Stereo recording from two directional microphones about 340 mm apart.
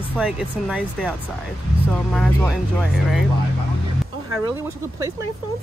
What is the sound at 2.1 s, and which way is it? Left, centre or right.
Speech, centre.